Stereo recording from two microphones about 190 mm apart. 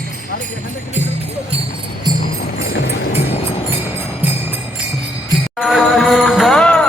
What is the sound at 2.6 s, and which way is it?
Music, 60° left (ahead or behind).